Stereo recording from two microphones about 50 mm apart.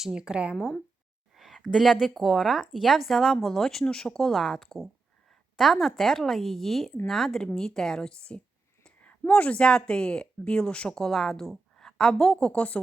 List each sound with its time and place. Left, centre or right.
0.0 s speech: centre
1.4 s a sound: centre
1.7 s speech: centre
8.8 s a woman's voice: left